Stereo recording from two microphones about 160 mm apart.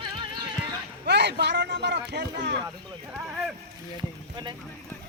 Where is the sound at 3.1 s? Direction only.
5° right (ahead or behind).